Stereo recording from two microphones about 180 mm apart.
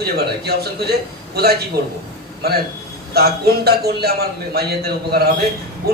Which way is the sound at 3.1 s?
60° right (ahead or behind).